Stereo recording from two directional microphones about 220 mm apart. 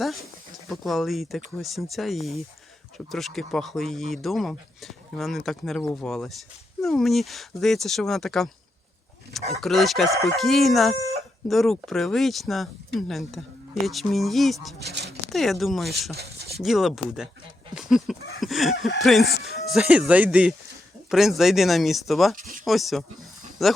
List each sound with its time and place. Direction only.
0.7 s speech: centre (ahead or behind)
9.6 s speech: centre (ahead or behind)
14.8 s speech: 50° right (ahead or behind)
15.3 s speech: centre (ahead or behind)
22.4 s a sound: 35° right (ahead or behind)
22.6 s speech: centre (ahead or behind)